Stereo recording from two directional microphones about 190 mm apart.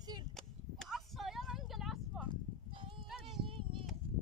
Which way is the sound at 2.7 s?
25° right (ahead or behind).